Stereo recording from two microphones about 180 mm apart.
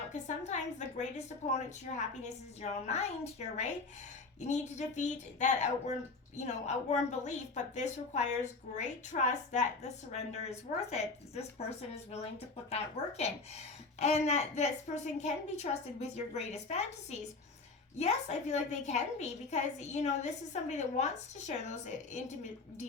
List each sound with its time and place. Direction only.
0.1 s a woman's voice: 40° left (ahead or behind)